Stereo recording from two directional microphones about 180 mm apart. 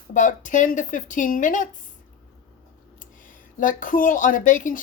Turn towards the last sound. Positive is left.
turn(degrees=45)  # may be behind; listen again after turning